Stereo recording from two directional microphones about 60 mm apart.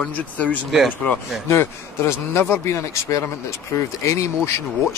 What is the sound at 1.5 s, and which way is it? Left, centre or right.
Speech, left.